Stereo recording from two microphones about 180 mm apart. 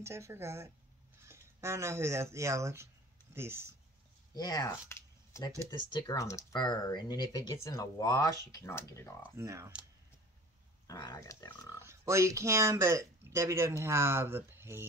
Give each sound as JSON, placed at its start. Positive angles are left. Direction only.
{"t": 0.0, "sound": "speech", "side_deg": -15}
{"t": 4.3, "sound": "speech", "side_deg": 20}
{"t": 9.4, "sound": "speech", "side_deg": -15}
{"t": 10.9, "sound": "speech", "side_deg": 20}
{"t": 11.8, "sound": "speech", "side_deg": -15}